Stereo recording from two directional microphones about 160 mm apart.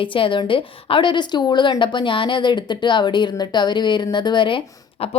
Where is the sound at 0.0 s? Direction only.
30° left (ahead or behind).